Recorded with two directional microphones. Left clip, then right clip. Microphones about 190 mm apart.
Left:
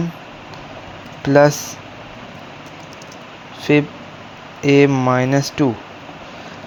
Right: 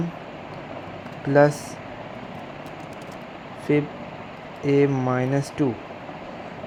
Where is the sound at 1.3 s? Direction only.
20° left (ahead or behind).